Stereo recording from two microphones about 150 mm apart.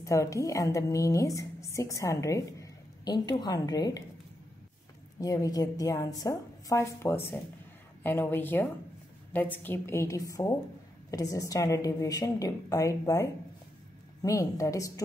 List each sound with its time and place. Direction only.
0.0 s a woman's voice: 20° left (ahead or behind)
5.2 s a woman's voice: 25° left (ahead or behind)